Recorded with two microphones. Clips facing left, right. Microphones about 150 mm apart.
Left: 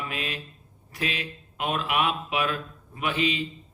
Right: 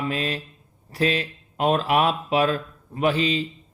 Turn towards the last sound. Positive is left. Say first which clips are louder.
# right 5 dB
turn(degrees=-35)  # may be behind; listen again after turning